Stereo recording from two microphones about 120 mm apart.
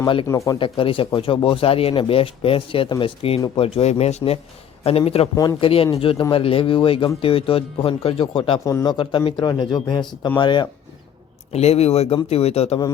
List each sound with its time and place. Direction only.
0.3 s speech: 25° left (ahead or behind)
0.6 s a man's voice: 45° left (ahead or behind)
8.6 s speech: 30° left (ahead or behind)
9.0 s speech: 45° left (ahead or behind)
11.5 s a man's voice: 60° left (ahead or behind)